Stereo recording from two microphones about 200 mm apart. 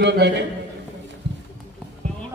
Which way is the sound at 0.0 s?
60° right (ahead or behind).